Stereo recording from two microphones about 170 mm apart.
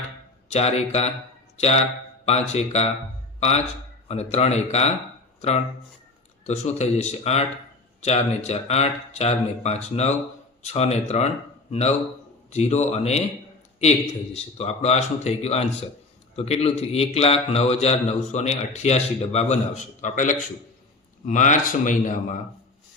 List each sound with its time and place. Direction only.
0.5 s a man's voice: 40° left (ahead or behind)
4.1 s a man's voice: 40° left (ahead or behind)
14.3 s a man's voice: 40° left (ahead or behind)